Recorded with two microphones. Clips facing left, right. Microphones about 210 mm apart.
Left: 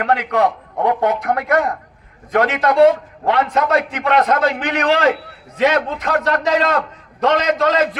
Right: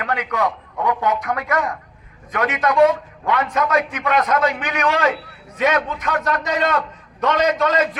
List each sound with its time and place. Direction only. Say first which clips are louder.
0.0 s a man's voice: left 5 dB; 65° left (ahead or behind)